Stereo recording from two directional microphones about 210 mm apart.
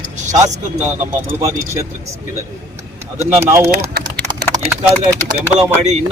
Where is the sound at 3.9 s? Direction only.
50° right (ahead or behind).